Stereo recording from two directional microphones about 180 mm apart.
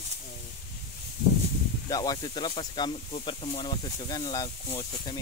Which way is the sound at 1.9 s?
20° left (ahead or behind).